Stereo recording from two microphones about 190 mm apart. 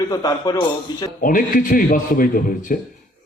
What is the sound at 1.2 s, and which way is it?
A man's voice, 45° left (ahead or behind).